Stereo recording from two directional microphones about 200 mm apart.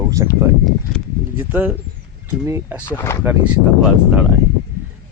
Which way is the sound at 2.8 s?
15° left (ahead or behind).